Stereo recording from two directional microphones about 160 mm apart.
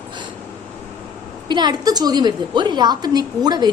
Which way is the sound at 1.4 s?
30° right (ahead or behind).